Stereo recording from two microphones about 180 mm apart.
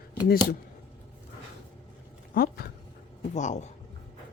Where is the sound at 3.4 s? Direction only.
40° left (ahead or behind).